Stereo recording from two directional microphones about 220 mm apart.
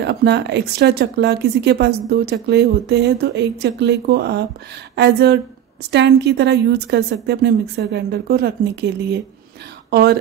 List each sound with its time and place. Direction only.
0.0 s speech: 50° right (ahead or behind)
9.8 s speech: 45° right (ahead or behind)